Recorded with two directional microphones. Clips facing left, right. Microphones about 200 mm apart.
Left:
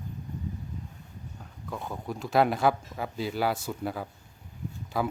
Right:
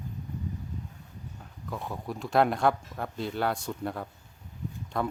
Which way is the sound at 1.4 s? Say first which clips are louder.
Even; centre (ahead or behind).